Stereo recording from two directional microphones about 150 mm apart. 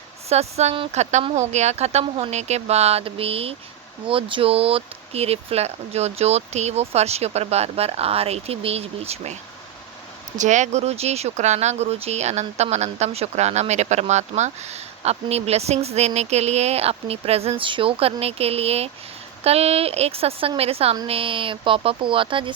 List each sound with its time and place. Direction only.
0.3 s speech: 45° right (ahead or behind)